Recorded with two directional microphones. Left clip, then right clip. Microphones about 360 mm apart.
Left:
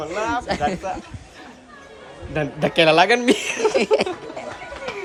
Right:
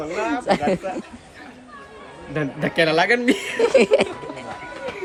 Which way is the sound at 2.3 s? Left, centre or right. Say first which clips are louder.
Left 2 dB; centre.